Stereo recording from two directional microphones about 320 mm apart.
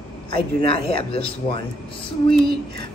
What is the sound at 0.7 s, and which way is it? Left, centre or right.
Speech, centre.